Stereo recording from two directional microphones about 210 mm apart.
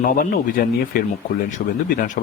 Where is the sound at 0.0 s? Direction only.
40° left (ahead or behind).